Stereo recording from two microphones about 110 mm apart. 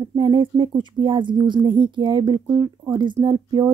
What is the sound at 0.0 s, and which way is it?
Speech, 40° right (ahead or behind).